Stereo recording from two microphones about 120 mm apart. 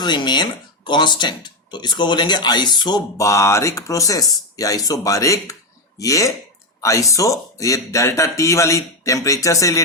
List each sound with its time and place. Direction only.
0.0 s speech: 40° left (ahead or behind)
3.2 s speech: 25° left (ahead or behind)